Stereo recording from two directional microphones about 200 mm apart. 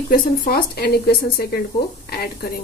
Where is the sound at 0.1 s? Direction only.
45° left (ahead or behind).